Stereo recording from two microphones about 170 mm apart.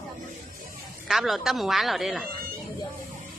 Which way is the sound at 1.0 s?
Centre (ahead or behind).